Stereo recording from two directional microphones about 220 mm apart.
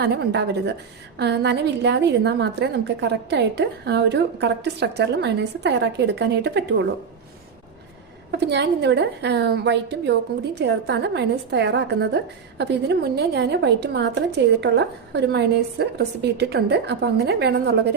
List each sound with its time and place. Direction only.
0.0 s a woman's voice: 50° right (ahead or behind)
8.3 s a woman's voice: 50° right (ahead or behind)